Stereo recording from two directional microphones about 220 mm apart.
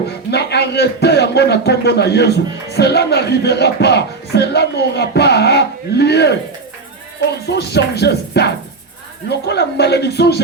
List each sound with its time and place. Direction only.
0.3 s a man's voice: 50° left (ahead or behind)
7.4 s a man's voice: 50° left (ahead or behind)
9.5 s a man's voice: 50° left (ahead or behind)